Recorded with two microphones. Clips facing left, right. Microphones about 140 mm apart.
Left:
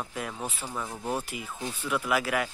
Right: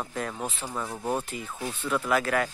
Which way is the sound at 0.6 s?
10° right (ahead or behind).